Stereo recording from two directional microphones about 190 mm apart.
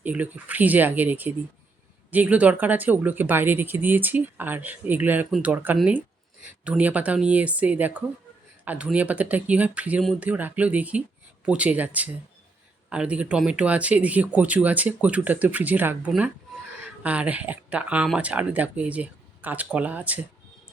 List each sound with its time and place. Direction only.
0.0 s speech: 10° right (ahead or behind)